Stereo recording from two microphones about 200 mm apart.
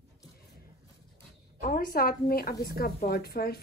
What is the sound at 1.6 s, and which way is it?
Speech, 45° left (ahead or behind).